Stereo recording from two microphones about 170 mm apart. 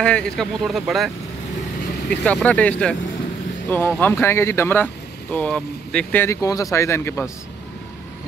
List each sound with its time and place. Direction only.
0.0 s speech: 5° left (ahead or behind)